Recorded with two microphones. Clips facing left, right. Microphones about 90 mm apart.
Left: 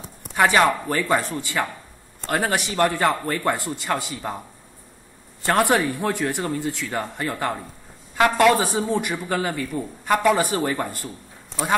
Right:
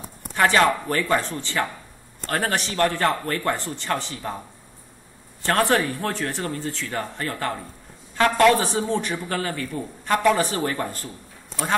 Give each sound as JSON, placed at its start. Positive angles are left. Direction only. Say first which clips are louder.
{"t": 0.3, "sound": "a man's voice", "louder": "left 1 dB", "side_deg": 15}
{"t": 5.4, "sound": "a man's voice", "louder": "left 1 dB", "side_deg": 15}